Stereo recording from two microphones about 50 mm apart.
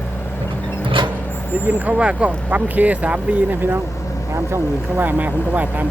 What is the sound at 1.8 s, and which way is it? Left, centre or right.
Speech, right.